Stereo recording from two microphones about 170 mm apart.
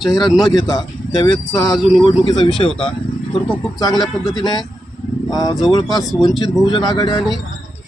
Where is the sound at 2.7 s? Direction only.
5° left (ahead or behind).